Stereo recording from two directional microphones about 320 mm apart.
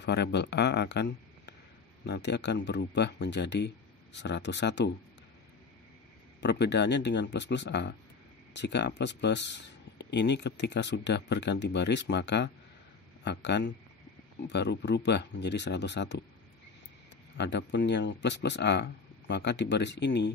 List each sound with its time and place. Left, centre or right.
0.0 s speech: left
6.4 s speech: left
17.4 s speech: left